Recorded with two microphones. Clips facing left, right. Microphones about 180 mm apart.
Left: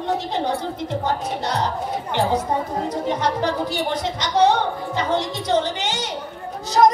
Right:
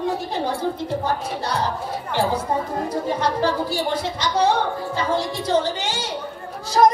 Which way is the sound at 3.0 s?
20° left (ahead or behind).